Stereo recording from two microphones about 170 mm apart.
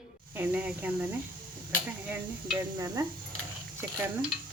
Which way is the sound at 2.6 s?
25° right (ahead or behind).